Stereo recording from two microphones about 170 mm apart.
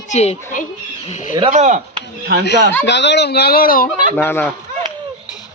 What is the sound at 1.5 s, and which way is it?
Speech, 45° right (ahead or behind).